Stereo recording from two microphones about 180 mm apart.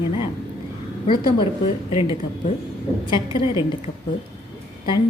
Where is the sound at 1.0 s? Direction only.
25° left (ahead or behind).